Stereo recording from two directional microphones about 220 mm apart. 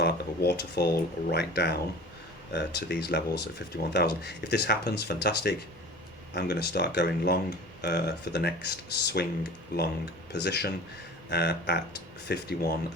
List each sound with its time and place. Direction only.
0.0 s speech: 45° left (ahead or behind)